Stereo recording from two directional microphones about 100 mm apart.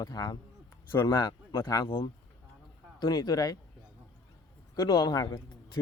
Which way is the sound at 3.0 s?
40° left (ahead or behind).